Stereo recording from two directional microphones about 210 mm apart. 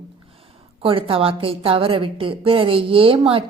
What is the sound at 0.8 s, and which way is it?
A woman's voice, 25° right (ahead or behind).